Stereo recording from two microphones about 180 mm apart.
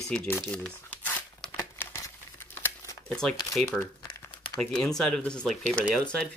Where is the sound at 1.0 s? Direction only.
10° left (ahead or behind).